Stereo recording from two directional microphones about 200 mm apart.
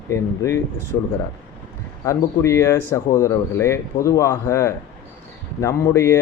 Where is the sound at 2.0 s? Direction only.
15° left (ahead or behind).